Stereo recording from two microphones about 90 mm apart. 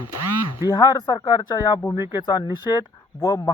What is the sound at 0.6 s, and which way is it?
Speech, 50° left (ahead or behind).